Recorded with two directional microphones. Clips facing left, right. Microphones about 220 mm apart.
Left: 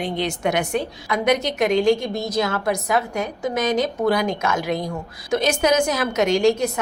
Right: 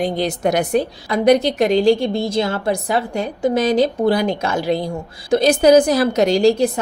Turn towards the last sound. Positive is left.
turn(degrees=-35)  # may be behind; listen again after turning